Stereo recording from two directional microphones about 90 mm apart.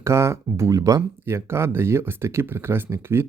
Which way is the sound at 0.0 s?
30° right (ahead or behind).